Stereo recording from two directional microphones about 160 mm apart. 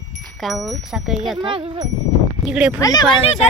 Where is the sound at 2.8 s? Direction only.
20° left (ahead or behind).